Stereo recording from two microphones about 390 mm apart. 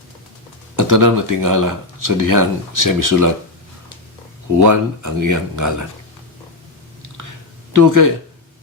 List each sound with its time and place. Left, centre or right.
0.8 s speech: right
4.6 s speech: right
7.7 s speech: right